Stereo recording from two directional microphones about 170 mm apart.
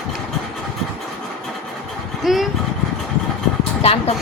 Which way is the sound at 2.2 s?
Centre (ahead or behind).